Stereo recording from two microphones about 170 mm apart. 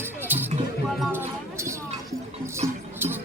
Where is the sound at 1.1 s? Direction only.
15° right (ahead or behind).